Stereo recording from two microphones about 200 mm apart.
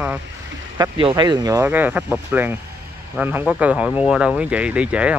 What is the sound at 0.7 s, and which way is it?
Speech, 20° right (ahead or behind).